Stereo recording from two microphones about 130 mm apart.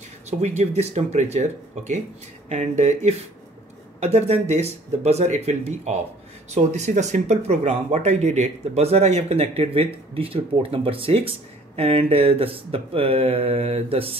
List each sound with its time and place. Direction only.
0.3 s speech: 60° right (ahead or behind)